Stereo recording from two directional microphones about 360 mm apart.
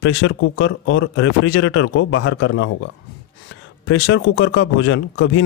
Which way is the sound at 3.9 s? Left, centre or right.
Left.